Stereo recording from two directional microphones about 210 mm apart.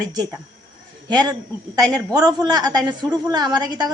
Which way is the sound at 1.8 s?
20° right (ahead or behind).